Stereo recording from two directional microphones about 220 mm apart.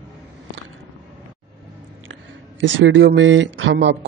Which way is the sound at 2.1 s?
55° right (ahead or behind).